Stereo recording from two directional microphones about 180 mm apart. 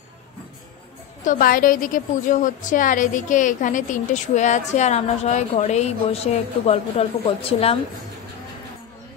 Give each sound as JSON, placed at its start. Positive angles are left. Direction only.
{"t": 1.2, "sound": "a woman's voice", "side_deg": 50}